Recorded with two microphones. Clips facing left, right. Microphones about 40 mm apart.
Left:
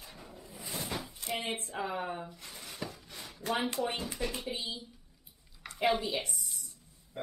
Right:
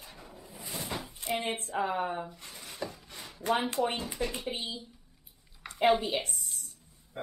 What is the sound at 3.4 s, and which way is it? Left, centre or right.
Speech, centre.